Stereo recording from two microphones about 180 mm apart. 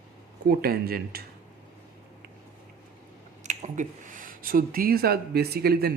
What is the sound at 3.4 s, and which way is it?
Speech, 40° right (ahead or behind).